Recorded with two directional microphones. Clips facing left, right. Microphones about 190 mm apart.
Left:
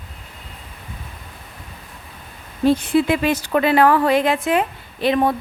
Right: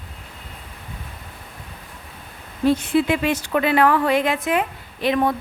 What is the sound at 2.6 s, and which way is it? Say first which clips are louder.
A woman's voice: left 2 dB; 35° left (ahead or behind).